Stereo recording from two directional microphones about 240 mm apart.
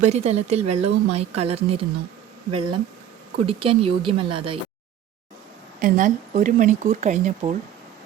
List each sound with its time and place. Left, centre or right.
0.0 s a woman's voice: right
5.8 s speech: right